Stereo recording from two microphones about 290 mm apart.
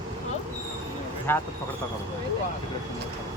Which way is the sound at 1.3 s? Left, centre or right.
Centre.